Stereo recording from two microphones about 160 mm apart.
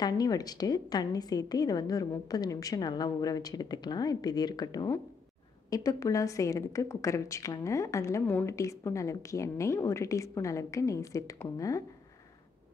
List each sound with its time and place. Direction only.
0.0 s a woman's voice: 25° left (ahead or behind)